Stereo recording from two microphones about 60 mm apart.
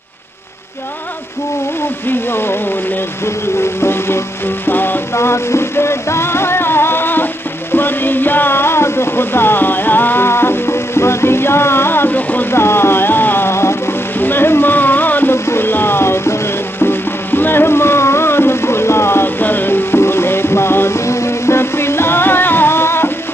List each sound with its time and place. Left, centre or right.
2.0 s speech: left
3.8 s music: left
5.1 s music: left
15.3 s music: left